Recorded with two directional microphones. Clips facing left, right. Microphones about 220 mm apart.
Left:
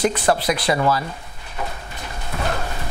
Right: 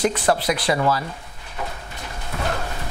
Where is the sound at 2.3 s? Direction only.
20° left (ahead or behind).